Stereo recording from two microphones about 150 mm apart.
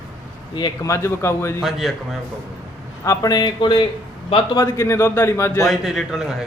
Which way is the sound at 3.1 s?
25° left (ahead or behind).